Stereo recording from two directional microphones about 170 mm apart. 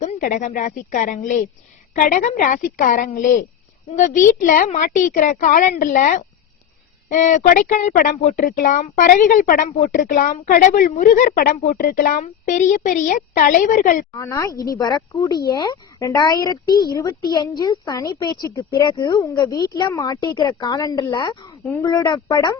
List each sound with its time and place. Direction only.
0.0 s a woman's voice: 45° left (ahead or behind)
14.2 s speech: 20° left (ahead or behind)